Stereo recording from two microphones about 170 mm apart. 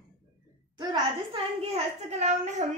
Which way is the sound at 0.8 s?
30° right (ahead or behind).